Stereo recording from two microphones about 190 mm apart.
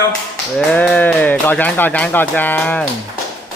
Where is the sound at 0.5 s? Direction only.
5° left (ahead or behind).